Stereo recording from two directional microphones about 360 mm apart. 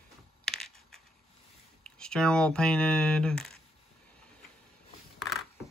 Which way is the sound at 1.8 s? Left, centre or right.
Centre.